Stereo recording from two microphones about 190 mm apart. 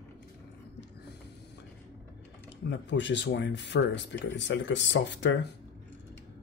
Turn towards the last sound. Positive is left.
turn(degrees=70)  # may be behind; listen again after turning